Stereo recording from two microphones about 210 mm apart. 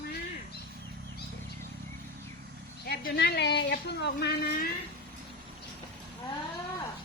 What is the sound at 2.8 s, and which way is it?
Speech, 45° left (ahead or behind).